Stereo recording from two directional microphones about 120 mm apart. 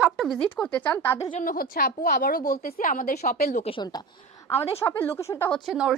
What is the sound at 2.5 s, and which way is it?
A woman's voice, 90° left.